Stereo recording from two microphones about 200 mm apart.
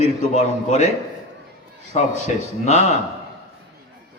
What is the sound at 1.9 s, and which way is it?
Speech, 35° left (ahead or behind).